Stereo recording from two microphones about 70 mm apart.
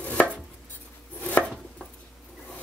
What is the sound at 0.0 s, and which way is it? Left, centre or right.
Chopping, left.